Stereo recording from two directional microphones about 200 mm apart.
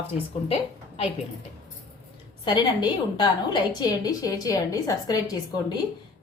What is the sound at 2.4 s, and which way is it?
A woman's voice, 20° left (ahead or behind).